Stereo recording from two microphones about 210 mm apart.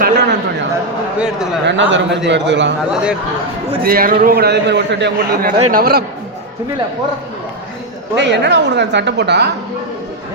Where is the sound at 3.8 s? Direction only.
45° right (ahead or behind).